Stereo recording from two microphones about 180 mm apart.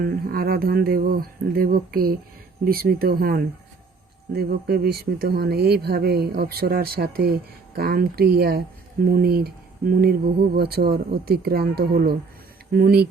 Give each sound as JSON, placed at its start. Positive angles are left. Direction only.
{"t": 0.0, "sound": "speech", "side_deg": -55}